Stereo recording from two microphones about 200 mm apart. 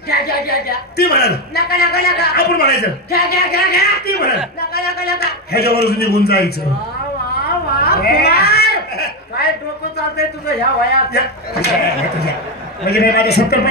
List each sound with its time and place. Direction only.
0.1 s a man's voice: 50° left (ahead or behind)
7.4 s a sound: 50° left (ahead or behind)
10.9 s a man's voice: 55° left (ahead or behind)
12.8 s a man's voice: 50° left (ahead or behind)